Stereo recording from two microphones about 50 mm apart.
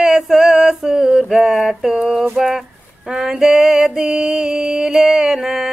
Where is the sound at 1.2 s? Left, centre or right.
Centre.